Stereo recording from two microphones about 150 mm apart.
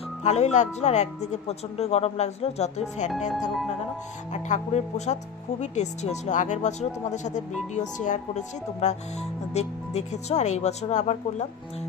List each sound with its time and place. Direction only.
0.2 s speech: 50° left (ahead or behind)
4.3 s speech: 50° left (ahead or behind)